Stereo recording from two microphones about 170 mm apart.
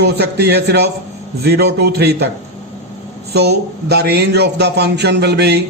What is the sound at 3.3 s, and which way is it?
Speech, 75° right (ahead or behind).